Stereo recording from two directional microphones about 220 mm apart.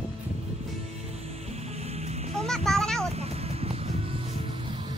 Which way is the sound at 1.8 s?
30° right (ahead or behind).